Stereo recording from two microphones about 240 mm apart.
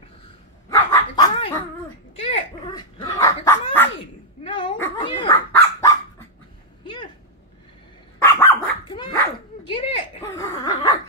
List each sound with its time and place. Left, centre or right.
0.7 s dog: centre
4.4 s dog: left
8.2 s dog: centre